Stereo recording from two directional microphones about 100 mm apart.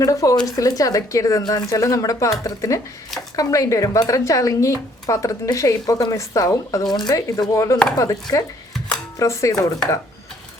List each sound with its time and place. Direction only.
0.0 s speech: 35° left (ahead or behind)